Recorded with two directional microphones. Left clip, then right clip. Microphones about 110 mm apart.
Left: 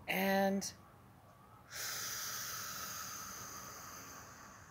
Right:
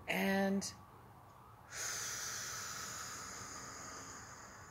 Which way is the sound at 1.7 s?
40° left (ahead or behind).